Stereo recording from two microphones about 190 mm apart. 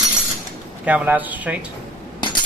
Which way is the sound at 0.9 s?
10° right (ahead or behind).